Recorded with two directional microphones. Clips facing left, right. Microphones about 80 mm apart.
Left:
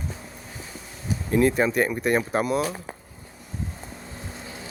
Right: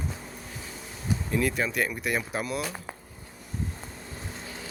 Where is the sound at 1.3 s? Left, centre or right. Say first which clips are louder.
Left 8 dB; left.